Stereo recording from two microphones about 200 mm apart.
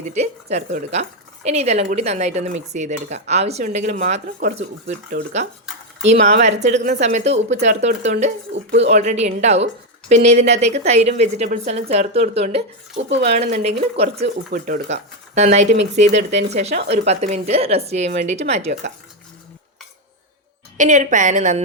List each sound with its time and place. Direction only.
0.1 s speech: 35° right (ahead or behind)
6.1 s a woman's voice: 50° right (ahead or behind)
6.4 s speech: 35° right (ahead or behind)
20.7 s speech: 40° right (ahead or behind)